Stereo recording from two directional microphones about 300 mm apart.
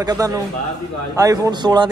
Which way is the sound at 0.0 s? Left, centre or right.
Centre.